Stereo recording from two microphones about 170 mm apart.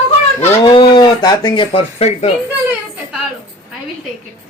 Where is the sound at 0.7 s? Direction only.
25° left (ahead or behind).